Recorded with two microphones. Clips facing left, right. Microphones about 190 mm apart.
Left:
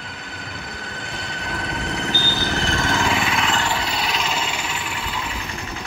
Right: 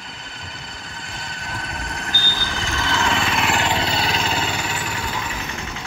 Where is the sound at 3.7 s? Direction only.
30° right (ahead or behind).